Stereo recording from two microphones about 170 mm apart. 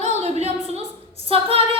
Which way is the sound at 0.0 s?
40° right (ahead or behind).